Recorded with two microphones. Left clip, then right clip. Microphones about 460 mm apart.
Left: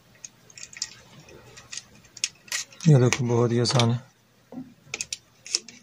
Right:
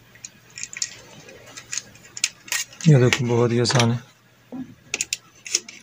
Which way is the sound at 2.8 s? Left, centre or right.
Left.